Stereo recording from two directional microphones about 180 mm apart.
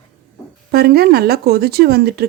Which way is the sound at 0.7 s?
60° right (ahead or behind).